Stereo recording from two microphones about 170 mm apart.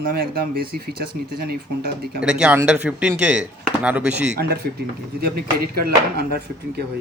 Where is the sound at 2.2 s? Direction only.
5° right (ahead or behind).